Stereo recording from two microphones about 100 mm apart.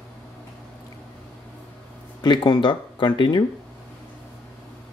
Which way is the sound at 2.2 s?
50° left (ahead or behind).